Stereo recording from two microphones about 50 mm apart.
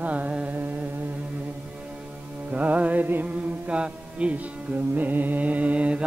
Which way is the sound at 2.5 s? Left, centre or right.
Right.